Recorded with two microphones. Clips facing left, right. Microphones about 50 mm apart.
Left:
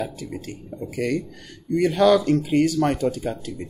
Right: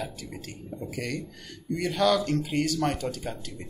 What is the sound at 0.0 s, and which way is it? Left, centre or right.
Speech, centre.